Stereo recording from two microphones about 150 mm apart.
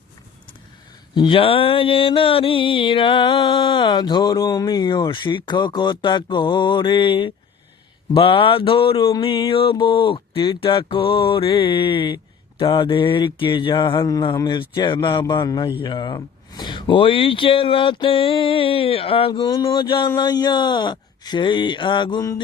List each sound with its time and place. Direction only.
1.1 s speech: 35° left (ahead or behind)